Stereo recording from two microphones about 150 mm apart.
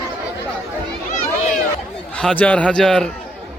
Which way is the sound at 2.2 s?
10° left (ahead or behind).